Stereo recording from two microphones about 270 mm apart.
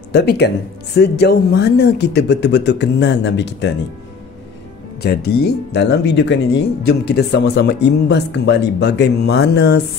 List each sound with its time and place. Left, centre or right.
0.1 s speech: left
5.0 s speech: left